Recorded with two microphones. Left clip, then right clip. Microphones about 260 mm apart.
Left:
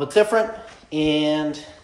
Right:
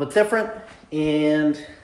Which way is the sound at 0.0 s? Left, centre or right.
Centre.